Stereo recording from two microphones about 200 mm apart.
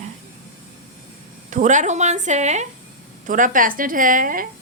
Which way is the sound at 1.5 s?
40° right (ahead or behind).